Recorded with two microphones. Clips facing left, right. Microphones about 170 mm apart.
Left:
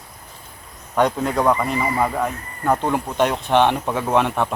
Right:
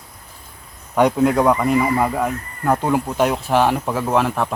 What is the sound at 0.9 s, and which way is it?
A man's voice, 10° right (ahead or behind).